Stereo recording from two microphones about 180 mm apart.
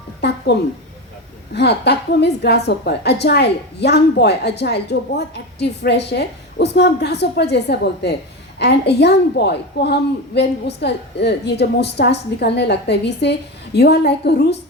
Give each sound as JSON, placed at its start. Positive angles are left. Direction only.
{"t": 0.2, "sound": "speech", "side_deg": 65}
{"t": 1.5, "sound": "a woman's voice", "side_deg": 65}